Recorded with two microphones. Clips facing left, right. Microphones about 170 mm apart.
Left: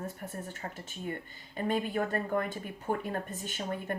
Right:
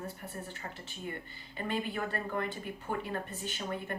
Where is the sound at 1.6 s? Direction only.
45° left (ahead or behind).